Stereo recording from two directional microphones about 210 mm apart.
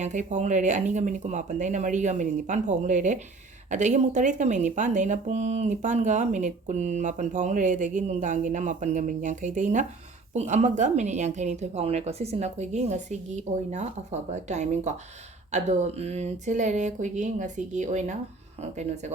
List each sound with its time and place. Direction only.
0.0 s speech: 35° right (ahead or behind)